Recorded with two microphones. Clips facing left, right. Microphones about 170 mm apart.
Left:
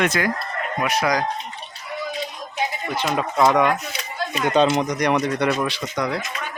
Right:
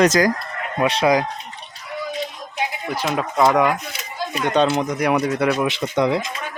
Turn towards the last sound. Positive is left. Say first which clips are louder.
# right 6 dB
turn(degrees=-25)  # may be behind; listen again after turning